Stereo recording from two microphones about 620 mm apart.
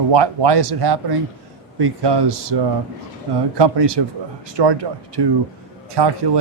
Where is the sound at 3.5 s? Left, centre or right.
Right.